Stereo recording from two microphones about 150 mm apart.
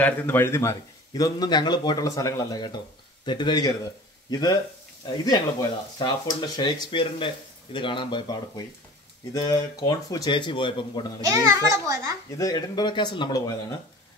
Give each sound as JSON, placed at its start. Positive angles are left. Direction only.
{"t": 0.0, "sound": "a man's voice", "side_deg": 15}
{"t": 11.2, "sound": "a child's voice", "side_deg": -20}
{"t": 12.4, "sound": "a man's voice", "side_deg": 25}